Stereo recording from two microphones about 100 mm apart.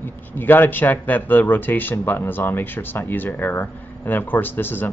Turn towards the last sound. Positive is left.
turn(degrees=20)  # may be behind; listen again after turning